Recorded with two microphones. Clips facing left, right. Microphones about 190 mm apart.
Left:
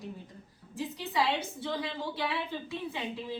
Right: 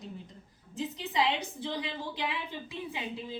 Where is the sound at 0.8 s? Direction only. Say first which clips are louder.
Even; 20° right (ahead or behind).